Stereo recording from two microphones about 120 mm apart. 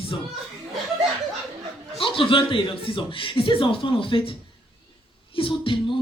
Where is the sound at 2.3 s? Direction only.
45° left (ahead or behind).